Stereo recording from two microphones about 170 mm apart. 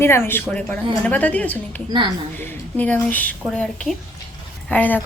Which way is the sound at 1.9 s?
30° right (ahead or behind).